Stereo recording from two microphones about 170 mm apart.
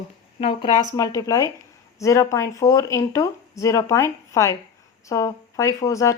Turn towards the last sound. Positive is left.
turn(degrees=20)  # may be behind; listen again after turning